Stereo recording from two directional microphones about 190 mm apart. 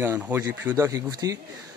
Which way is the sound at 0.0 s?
10° right (ahead or behind).